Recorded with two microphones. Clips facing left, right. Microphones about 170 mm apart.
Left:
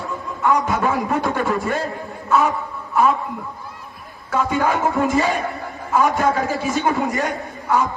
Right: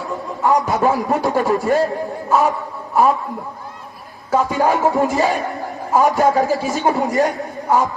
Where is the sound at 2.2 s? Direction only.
35° right (ahead or behind).